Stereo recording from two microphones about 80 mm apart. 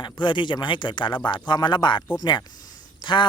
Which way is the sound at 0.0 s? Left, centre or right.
Left.